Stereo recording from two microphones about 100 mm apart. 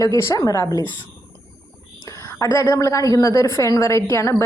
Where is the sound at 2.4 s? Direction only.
30° left (ahead or behind).